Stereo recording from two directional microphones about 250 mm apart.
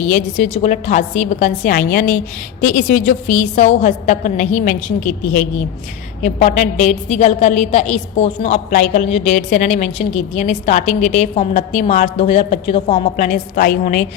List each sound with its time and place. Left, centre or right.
0.1 s a woman's voice: left